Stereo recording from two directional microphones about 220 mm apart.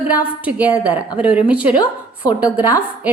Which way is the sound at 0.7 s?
15° left (ahead or behind).